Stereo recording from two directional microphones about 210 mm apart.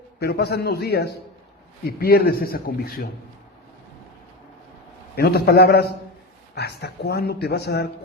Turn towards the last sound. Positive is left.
turn(degrees=50)  # may be behind; listen again after turning